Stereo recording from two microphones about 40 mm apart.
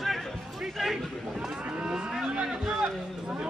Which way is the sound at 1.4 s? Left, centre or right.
Right.